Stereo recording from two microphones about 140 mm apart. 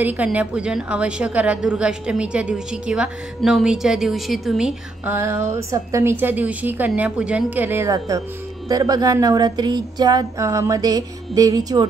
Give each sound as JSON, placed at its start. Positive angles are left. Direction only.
{"t": 0.0, "sound": "a woman's voice", "side_deg": -10}
{"t": 5.1, "sound": "a woman's voice", "side_deg": -20}